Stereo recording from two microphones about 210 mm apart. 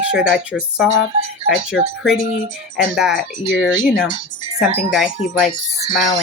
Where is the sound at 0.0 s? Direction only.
5° right (ahead or behind).